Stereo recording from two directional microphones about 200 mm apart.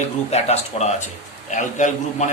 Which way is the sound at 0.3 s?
35° left (ahead or behind).